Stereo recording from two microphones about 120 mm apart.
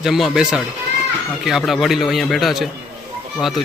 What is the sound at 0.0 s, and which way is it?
Speech, 5° right (ahead or behind).